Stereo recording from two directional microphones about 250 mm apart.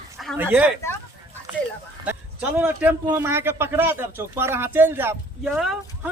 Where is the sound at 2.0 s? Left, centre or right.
Centre.